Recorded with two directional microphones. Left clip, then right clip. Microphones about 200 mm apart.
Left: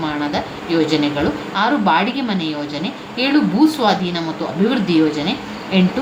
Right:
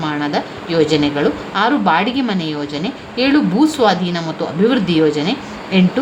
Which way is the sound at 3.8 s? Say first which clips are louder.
Right 2 dB; 35° right (ahead or behind).